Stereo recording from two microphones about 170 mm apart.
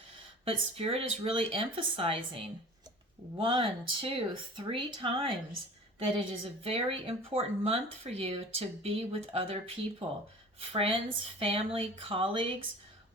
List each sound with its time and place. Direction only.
0.4 s speech: 35° right (ahead or behind)